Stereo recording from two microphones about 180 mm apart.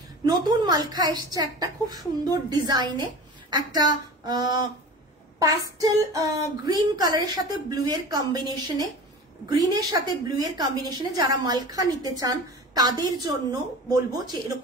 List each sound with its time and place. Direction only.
0.2 s a woman's voice: 20° right (ahead or behind)